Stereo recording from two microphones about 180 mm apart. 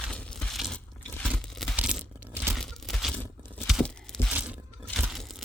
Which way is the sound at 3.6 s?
Centre (ahead or behind).